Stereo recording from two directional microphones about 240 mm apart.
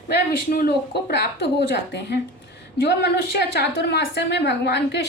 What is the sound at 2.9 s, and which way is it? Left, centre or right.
A woman's voice, left.